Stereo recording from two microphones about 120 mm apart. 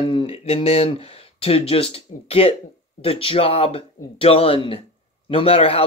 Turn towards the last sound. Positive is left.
turn(degrees=55)  # may be behind; listen again after turning